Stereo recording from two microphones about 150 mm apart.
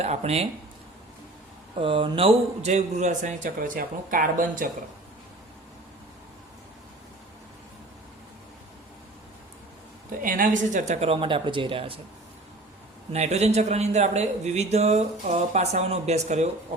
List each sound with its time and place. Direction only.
0.0 s speech: 45° right (ahead or behind)
1.8 s a man's voice: 35° right (ahead or behind); by 4.7 s 65° right (ahead or behind)
10.2 s speech: 65° right (ahead or behind); by 11.9 s 35° right (ahead or behind)
13.1 s speech: 45° right (ahead or behind)